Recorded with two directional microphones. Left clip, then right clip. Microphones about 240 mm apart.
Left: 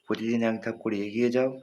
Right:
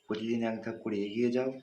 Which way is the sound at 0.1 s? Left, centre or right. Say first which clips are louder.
Left 6 dB; left.